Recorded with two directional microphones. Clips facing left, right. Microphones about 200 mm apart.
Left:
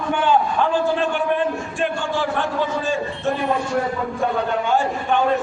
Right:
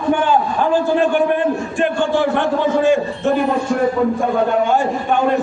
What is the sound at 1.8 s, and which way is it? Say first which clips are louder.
A man's voice: right 6 dB; 60° right (ahead or behind).